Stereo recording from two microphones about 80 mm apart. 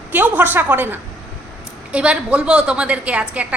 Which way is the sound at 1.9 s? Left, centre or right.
Centre.